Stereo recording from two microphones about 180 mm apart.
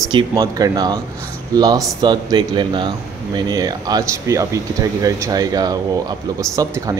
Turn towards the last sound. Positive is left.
turn(degrees=-20)  # may be behind; listen again after turning